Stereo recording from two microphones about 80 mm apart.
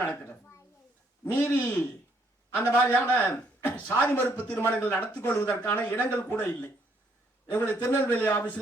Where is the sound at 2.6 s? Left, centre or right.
Centre.